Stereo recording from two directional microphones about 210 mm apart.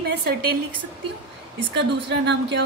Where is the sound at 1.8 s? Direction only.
55° right (ahead or behind).